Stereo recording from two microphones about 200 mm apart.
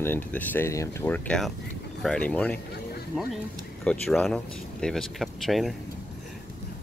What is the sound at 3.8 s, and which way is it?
Speech, 5° left (ahead or behind).